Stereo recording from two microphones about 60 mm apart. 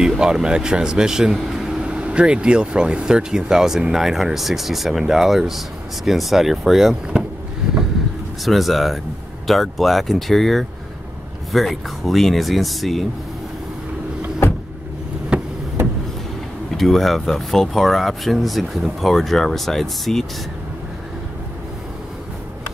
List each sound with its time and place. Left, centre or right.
0.2 s speech: centre
8.5 s speech: centre
15.3 s vehicle: centre
16.7 s speech: centre